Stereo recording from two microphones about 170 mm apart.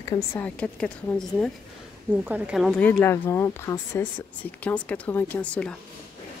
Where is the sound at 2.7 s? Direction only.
10° left (ahead or behind).